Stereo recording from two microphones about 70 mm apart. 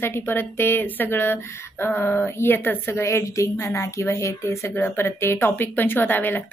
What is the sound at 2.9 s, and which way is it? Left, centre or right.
A woman's voice, left.